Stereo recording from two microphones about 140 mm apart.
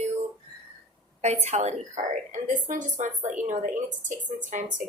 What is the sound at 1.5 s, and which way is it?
Speech, 50° right (ahead or behind).